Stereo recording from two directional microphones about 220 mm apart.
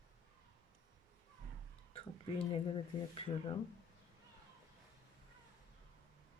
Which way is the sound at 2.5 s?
25° left (ahead or behind).